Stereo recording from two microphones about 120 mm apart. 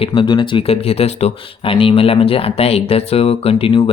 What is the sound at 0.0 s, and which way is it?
Speech, 45° left (ahead or behind).